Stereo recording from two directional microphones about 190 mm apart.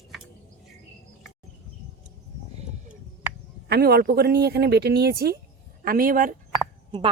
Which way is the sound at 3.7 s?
55° right (ahead or behind).